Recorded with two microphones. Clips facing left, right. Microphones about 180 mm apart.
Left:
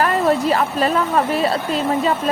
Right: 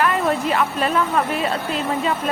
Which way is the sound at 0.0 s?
40° left (ahead or behind).